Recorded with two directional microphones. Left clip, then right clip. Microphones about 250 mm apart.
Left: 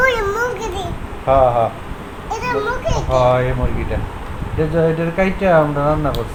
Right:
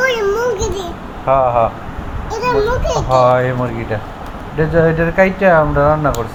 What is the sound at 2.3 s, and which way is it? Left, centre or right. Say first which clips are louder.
Speech: right 5 dB; centre.